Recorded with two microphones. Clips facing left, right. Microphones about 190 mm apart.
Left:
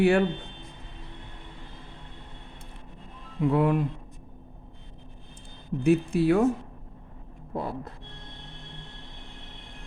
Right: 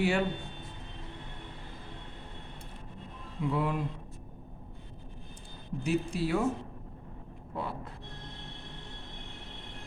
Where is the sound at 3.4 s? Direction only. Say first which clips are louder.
Left 8 dB; 55° left (ahead or behind).